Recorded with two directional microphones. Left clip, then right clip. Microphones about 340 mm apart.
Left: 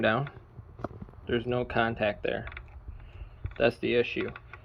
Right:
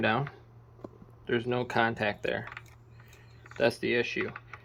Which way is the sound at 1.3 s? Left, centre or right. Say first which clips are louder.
Even; centre.